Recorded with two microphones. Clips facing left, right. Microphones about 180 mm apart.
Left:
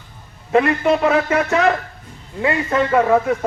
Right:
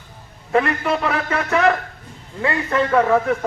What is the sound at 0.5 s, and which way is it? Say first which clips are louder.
A man's voice: left 4 dB; 25° left (ahead or behind).